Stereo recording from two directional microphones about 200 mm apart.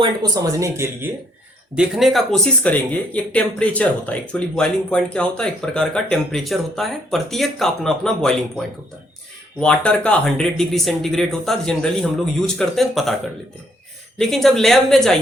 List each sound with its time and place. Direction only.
0.0 s speech: 20° right (ahead or behind)
1.7 s speech: 5° right (ahead or behind)
14.2 s speech: centre (ahead or behind)